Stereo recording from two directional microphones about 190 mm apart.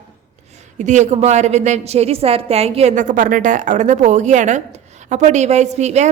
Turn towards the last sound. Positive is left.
turn(degrees=-35)  # may be behind; listen again after turning